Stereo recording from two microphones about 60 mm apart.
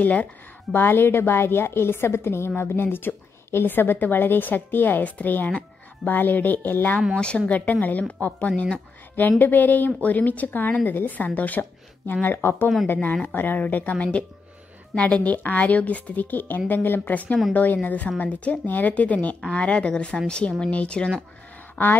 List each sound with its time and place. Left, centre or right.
0.0 s a woman's voice: left
7.2 s speech: centre
9.4 s a woman's voice: left
21.8 s a sound: left